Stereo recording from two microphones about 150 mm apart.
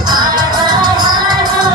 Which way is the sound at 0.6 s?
30° right (ahead or behind).